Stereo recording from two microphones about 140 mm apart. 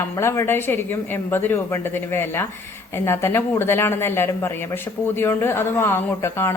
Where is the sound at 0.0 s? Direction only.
20° left (ahead or behind).